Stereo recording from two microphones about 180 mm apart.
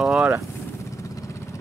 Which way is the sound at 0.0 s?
5° right (ahead or behind).